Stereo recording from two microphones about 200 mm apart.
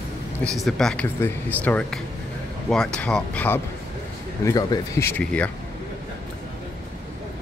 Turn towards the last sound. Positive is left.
turn(degrees=10)  # may be behind; listen again after turning